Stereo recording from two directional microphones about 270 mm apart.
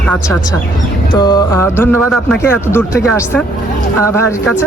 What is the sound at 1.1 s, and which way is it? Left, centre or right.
Speech, centre.